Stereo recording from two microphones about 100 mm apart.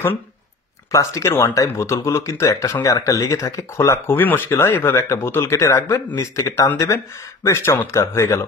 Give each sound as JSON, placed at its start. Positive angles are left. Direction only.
{"t": 0.9, "sound": "speech", "side_deg": 30}